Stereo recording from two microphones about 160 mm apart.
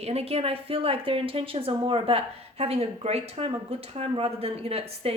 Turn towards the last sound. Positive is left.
turn(degrees=-40)  # may be behind; listen again after turning